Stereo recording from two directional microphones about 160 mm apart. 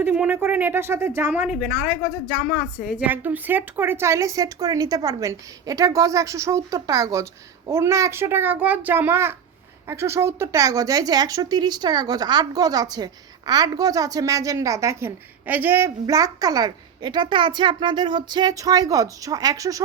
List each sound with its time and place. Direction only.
0.0 s speech: 10° right (ahead or behind)
3.1 s a woman's voice: 10° right (ahead or behind)